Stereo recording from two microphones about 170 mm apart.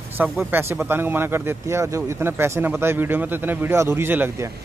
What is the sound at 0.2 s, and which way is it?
Speech, 10° right (ahead or behind).